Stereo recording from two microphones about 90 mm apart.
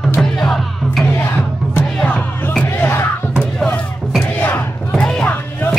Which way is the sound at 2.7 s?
25° left (ahead or behind).